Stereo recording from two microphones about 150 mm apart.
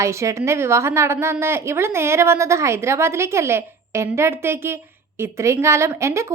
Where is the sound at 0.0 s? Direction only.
20° right (ahead or behind).